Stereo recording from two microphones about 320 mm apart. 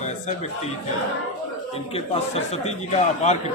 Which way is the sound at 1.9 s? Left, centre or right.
Centre.